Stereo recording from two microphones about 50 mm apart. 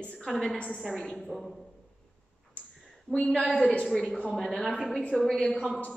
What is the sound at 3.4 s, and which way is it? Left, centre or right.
Speech, centre.